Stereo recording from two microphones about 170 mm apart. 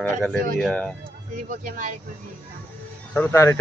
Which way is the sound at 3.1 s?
15° left (ahead or behind).